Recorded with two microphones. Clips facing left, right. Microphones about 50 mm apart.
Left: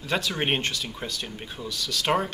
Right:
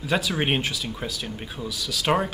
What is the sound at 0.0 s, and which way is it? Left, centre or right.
Speech, centre.